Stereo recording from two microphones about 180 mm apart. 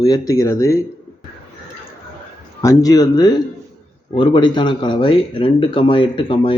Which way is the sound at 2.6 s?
20° left (ahead or behind).